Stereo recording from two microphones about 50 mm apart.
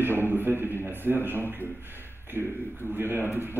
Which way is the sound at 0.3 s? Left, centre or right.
Right.